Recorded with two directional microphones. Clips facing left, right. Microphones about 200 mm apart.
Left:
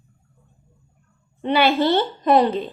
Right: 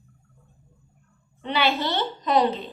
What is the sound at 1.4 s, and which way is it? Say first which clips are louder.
A woman's voice: left 6 dB; 55° left (ahead or behind).